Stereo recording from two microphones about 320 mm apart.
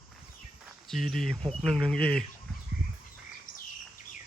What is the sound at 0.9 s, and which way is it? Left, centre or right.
Speech, centre.